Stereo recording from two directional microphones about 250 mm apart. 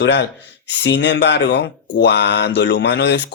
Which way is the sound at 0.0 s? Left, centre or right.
Left.